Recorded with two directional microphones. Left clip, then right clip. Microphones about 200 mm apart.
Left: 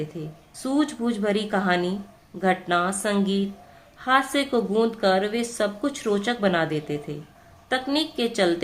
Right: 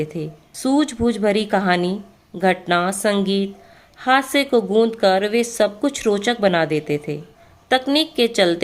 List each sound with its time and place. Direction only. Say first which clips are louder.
0.0 s a woman's voice: right 7 dB; 35° right (ahead or behind)